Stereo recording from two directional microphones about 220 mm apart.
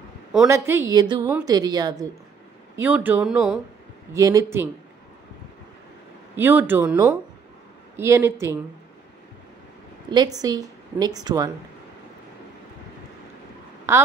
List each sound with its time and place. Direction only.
0.5 s a woman's voice: 10° right (ahead or behind)
4.1 s a woman's voice: 15° right (ahead or behind)
6.3 s a woman's voice: 10° right (ahead or behind)
10.0 s a woman's voice: 20° right (ahead or behind)
13.9 s a woman's voice: 10° right (ahead or behind)